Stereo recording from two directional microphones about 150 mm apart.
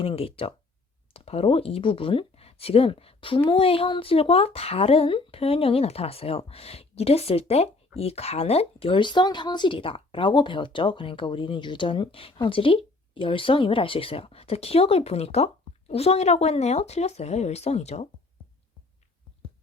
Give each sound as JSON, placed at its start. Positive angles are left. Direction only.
{"t": 0.0, "sound": "speech", "side_deg": 40}